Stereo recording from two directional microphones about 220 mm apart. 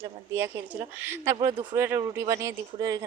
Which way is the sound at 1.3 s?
20° right (ahead or behind).